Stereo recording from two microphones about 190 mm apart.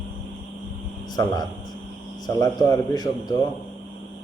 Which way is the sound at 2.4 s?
20° left (ahead or behind).